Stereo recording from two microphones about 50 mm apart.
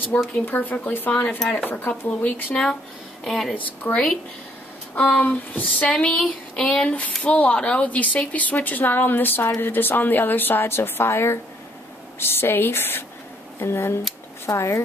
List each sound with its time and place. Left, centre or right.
0.1 s a woman's voice: left
2.5 s a sound: centre
3.3 s speech: centre
3.5 s speech: left
4.9 s a sound: left
5.3 s speech: left
5.9 s a woman's voice: centre
6.5 s a sound: centre
7.2 s speech: left
13.6 s speech: left
14.4 s speech: left